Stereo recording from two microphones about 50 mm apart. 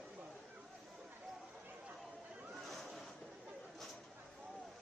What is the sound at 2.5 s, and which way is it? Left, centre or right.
Waves, centre.